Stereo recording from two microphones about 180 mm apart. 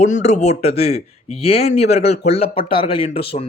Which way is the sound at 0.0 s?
40° left (ahead or behind).